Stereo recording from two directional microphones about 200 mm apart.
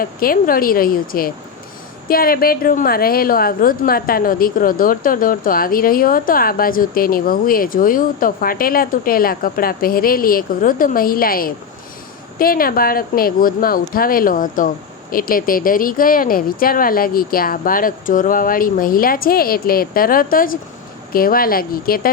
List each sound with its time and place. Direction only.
0.0 s a woman's voice: 45° left (ahead or behind)